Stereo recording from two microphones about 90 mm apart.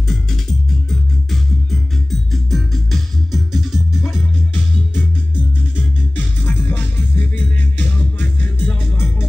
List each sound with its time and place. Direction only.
0.1 s music: 5° left (ahead or behind)
4.0 s music: 20° left (ahead or behind)
6.1 s music: 20° left (ahead or behind)